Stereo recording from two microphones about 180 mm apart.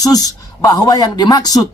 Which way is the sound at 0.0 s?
20° left (ahead or behind).